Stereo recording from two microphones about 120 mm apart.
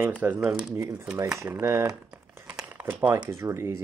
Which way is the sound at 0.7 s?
25° right (ahead or behind).